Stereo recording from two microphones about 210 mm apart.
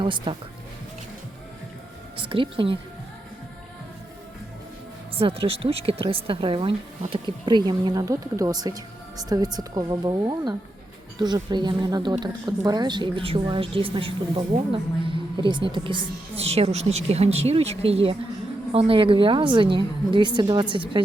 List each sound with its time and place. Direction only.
0.0 s a woman's voice: 25° right (ahead or behind)
2.1 s a woman's voice: 25° right (ahead or behind)
5.1 s a woman's voice: 25° right (ahead or behind)